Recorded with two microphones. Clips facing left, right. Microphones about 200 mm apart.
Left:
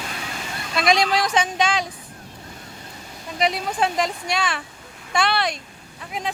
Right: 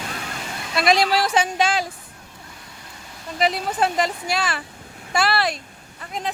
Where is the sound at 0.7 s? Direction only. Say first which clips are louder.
Right 1 dB; centre (ahead or behind).